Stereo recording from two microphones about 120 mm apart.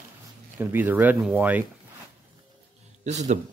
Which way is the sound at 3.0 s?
75° right (ahead or behind).